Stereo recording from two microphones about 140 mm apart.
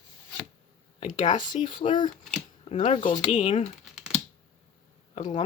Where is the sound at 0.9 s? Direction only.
35° left (ahead or behind).